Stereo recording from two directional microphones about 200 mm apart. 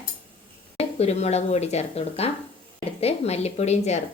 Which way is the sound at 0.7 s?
30° left (ahead or behind).